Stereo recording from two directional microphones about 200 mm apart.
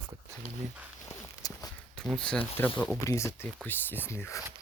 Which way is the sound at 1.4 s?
20° left (ahead or behind).